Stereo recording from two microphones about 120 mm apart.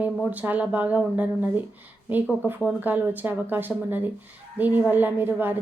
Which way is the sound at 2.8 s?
15° right (ahead or behind).